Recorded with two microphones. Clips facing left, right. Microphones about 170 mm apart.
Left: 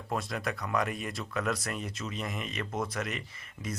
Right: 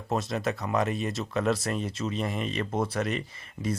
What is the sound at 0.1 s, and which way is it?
Speech, 25° right (ahead or behind).